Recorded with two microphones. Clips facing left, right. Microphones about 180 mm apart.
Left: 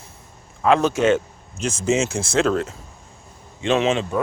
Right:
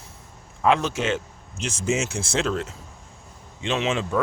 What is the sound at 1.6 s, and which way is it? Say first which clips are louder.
Speech: left 5 dB; 45° left (ahead or behind).